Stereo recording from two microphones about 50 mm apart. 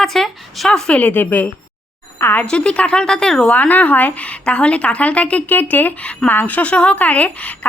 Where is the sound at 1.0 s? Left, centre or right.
Left.